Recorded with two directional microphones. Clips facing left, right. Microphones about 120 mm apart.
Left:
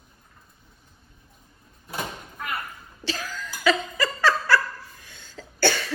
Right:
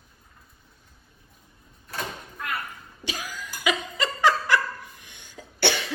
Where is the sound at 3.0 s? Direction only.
15° right (ahead or behind).